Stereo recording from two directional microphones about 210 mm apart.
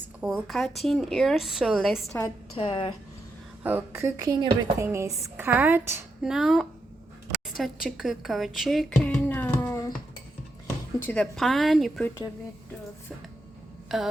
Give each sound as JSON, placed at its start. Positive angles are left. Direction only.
{"t": 0.2, "sound": "speech", "side_deg": 0}
{"t": 2.6, "sound": "speech", "side_deg": 25}
{"t": 3.6, "sound": "a woman's voice", "side_deg": -10}
{"t": 11.0, "sound": "speech", "side_deg": 5}
{"t": 13.9, "sound": "speech", "side_deg": 0}